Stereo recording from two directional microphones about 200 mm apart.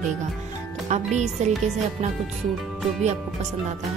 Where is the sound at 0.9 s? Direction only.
35° right (ahead or behind).